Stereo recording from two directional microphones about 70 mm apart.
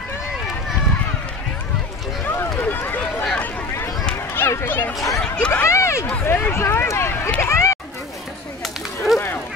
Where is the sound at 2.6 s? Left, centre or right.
Left.